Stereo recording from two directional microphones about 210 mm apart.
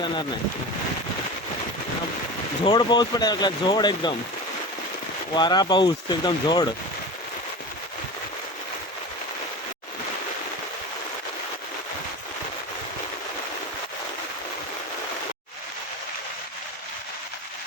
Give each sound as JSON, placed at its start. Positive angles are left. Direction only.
{"t": 0.0, "sound": "speech", "side_deg": 20}
{"t": 2.6, "sound": "speech", "side_deg": 20}
{"t": 5.3, "sound": "speech", "side_deg": 20}